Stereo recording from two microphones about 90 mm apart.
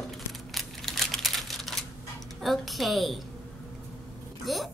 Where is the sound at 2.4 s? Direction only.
Centre (ahead or behind).